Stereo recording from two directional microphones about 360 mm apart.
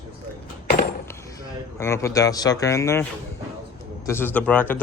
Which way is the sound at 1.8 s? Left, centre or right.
Centre.